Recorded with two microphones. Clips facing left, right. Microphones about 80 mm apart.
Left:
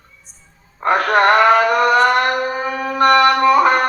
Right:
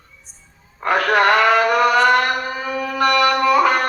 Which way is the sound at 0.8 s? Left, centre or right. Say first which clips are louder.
Left 2 dB; left.